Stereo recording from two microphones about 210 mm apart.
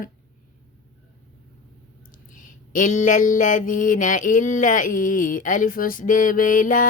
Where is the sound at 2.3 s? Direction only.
40° left (ahead or behind).